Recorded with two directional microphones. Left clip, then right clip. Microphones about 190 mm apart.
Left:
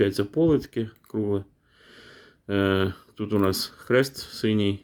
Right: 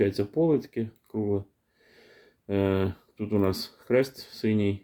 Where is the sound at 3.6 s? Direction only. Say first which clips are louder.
Left 2 dB; 20° left (ahead or behind).